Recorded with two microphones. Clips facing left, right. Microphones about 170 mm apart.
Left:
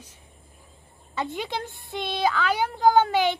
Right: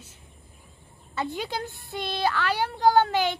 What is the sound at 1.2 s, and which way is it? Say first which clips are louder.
A woman's voice: even; centre (ahead or behind).